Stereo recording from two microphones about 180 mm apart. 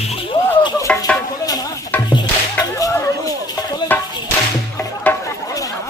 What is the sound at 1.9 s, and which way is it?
Music, 10° left (ahead or behind).